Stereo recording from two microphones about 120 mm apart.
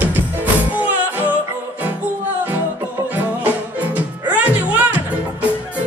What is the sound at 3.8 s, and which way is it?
Music, 15° right (ahead or behind).